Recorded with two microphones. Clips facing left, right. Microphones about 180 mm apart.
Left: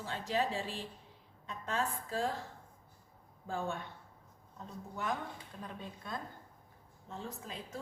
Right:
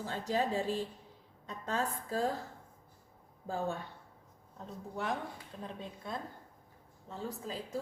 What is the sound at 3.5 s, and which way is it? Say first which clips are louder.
Speech: right 2 dB; 35° right (ahead or behind).